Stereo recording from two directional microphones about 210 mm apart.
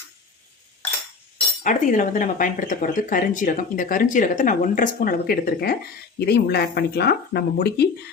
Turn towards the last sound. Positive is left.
turn(degrees=50)  # may be behind; listen again after turning